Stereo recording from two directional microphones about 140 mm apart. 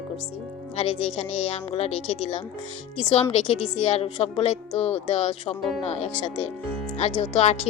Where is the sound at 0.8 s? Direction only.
45° left (ahead or behind).